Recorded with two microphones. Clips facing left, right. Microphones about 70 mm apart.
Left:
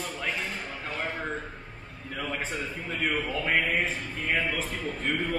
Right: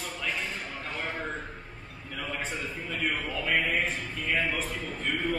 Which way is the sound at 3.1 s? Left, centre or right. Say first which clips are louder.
Left 2 dB; centre.